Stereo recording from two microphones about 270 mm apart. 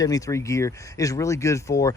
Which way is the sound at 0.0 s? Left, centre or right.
Centre.